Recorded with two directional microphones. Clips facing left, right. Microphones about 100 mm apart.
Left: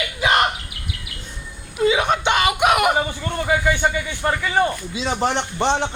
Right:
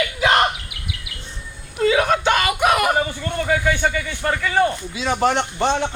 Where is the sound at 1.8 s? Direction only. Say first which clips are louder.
Right 1 dB; 20° left (ahead or behind).